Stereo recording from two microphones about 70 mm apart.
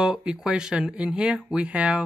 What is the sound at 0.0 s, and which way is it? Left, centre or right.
Speech, centre.